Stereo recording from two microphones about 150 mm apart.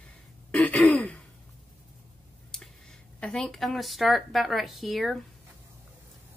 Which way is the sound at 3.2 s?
5° left (ahead or behind).